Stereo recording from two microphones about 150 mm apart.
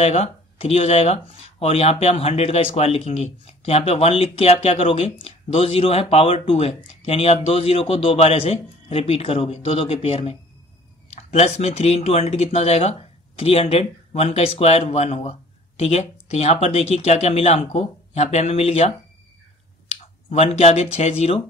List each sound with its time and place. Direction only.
0.0 s speech: 45° left (ahead or behind)